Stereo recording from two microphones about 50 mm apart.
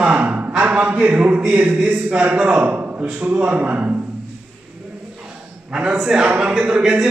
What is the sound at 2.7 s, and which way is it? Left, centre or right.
Speech, right.